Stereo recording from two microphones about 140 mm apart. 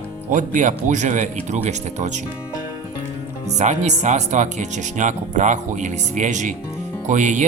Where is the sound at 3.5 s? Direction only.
55° right (ahead or behind).